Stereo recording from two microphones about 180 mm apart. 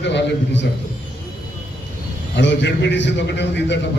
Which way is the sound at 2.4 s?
80° left.